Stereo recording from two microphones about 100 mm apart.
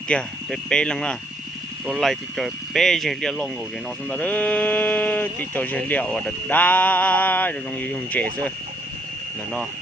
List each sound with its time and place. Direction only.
0.1 s speech: 10° left (ahead or behind)